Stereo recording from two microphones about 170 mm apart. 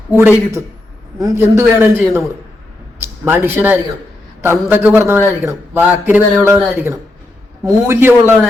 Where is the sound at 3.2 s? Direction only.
10° right (ahead or behind).